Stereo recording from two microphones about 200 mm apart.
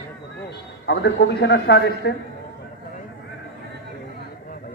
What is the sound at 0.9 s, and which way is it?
Speech, 60° left (ahead or behind).